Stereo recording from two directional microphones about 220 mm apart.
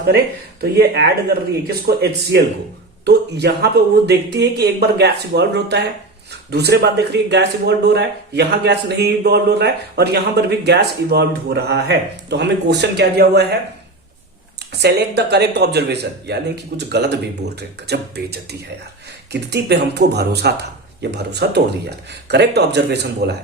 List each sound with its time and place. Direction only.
0.6 s speech: 45° right (ahead or behind)
14.7 s speech: 50° right (ahead or behind)